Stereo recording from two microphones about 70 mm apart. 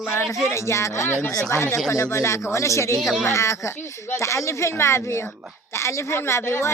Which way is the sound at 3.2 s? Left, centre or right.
Left.